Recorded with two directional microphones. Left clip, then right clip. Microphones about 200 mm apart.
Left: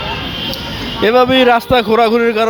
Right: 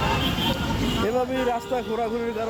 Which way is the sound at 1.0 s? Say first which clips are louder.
Left 16 dB; 35° left (ahead or behind).